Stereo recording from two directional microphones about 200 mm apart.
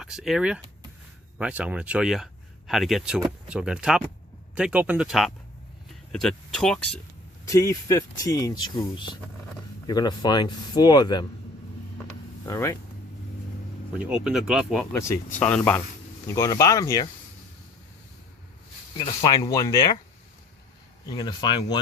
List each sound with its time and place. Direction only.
0.0 s speech: centre (ahead or behind)
7.4 s speech: 15° left (ahead or behind)
12.5 s speech: 15° left (ahead or behind)
14.3 s speech: 5° right (ahead or behind)
14.9 s speech: 15° left (ahead or behind)
18.9 s speech: 25° left (ahead or behind)
21.1 s speech: 20° left (ahead or behind)